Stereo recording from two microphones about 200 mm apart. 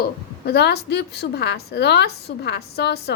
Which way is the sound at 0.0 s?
55° left (ahead or behind).